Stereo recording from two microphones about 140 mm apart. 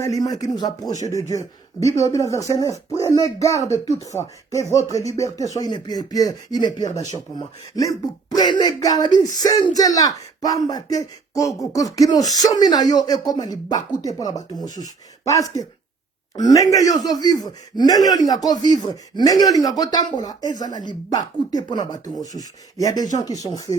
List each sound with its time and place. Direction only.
0.0 s speech: 25° left (ahead or behind)